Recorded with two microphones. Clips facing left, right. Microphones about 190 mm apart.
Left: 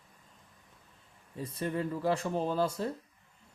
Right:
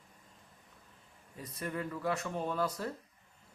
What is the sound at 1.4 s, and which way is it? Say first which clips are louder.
Speech: left 5 dB; 30° left (ahead or behind).